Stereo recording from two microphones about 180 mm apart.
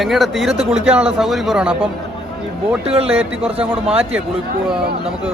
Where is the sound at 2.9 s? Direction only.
35° right (ahead or behind).